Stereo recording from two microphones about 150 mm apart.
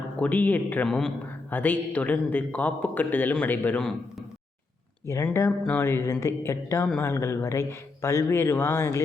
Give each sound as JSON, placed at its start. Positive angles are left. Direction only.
{"t": 0.2, "sound": "a man's voice", "side_deg": 10}
{"t": 5.0, "sound": "a man's voice", "side_deg": 15}